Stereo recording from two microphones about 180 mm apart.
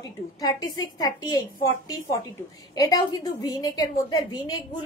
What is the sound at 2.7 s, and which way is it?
A woman's voice, 20° left (ahead or behind).